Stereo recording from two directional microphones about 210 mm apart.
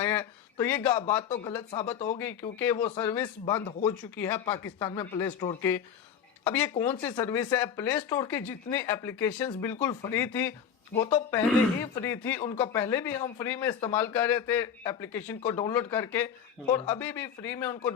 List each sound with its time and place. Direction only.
0.0 s speech: 10° left (ahead or behind)
1.1 s speech: 25° left (ahead or behind)
2.0 s a man's voice: 10° left (ahead or behind)
3.5 s speech: 25° left (ahead or behind)
3.8 s a man's voice: 10° left (ahead or behind)
4.4 s speech: 25° left (ahead or behind)
4.6 s a man's voice: 10° left (ahead or behind)
6.9 s a man's voice: 20° left (ahead or behind)